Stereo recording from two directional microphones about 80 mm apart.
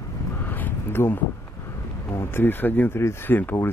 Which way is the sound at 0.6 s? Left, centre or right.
Left.